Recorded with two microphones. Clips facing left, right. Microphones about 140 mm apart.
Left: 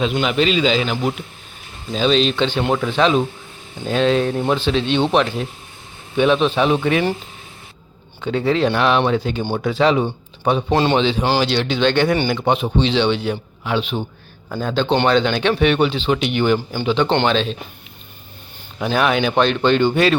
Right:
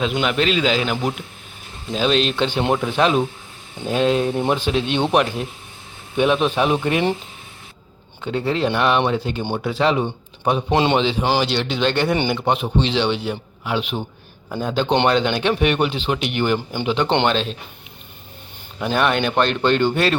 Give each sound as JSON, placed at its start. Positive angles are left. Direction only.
{"t": 0.0, "sound": "speech", "side_deg": 0}
{"t": 8.2, "sound": "speech", "side_deg": 0}
{"t": 10.7, "sound": "speech", "side_deg": -20}
{"t": 10.9, "sound": "speech", "side_deg": -5}
{"t": 18.8, "sound": "speech", "side_deg": 0}